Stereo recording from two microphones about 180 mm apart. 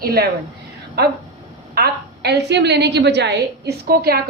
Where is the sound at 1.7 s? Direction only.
65° right (ahead or behind).